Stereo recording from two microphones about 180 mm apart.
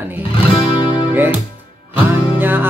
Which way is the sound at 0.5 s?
30° left (ahead or behind).